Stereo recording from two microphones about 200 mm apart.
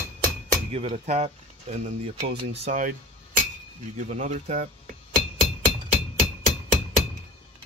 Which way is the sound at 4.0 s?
35° right (ahead or behind).